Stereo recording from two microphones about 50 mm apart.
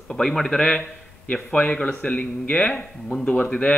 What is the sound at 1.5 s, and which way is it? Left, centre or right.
Speech, left.